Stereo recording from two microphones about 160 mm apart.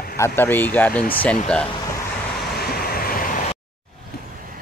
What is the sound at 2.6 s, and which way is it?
Waves, 70° left (ahead or behind).